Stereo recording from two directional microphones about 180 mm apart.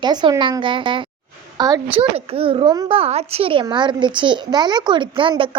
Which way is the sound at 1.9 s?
35° right (ahead or behind).